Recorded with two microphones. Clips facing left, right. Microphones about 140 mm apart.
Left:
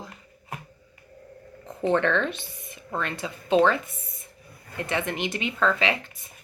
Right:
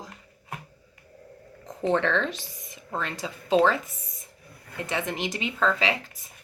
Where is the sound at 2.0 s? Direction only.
30° right (ahead or behind).